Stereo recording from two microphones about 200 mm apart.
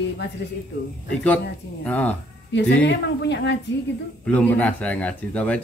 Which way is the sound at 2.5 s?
60° left (ahead or behind).